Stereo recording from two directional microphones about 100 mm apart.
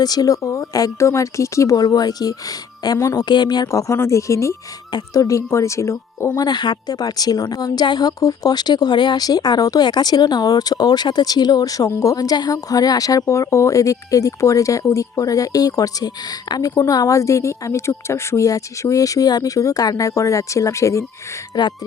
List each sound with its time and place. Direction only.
0.0 s speech: 40° left (ahead or behind)
3.2 s speech: 50° left (ahead or behind)
3.7 s speech: 30° left (ahead or behind)
4.9 s speech: 40° left (ahead or behind)
6.4 s speech: 50° left (ahead or behind); by 21.0 s 30° left (ahead or behind)
21.5 s speech: 45° left (ahead or behind)